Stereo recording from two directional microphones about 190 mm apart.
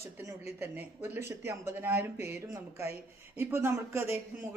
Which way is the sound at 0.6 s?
10° right (ahead or behind).